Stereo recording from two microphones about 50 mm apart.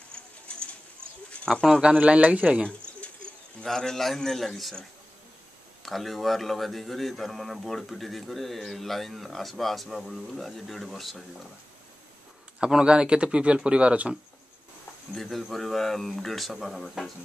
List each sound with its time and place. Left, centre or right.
0.1 s bird: left
1.5 s a man's voice: centre
2.0 s speech: right
3.6 s a man's voice: centre
5.8 s a man's voice: centre
12.5 s speech: centre
15.1 s a man's voice: centre